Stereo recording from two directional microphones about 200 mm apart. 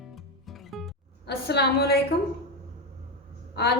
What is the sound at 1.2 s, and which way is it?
Speech, 55° left (ahead or behind).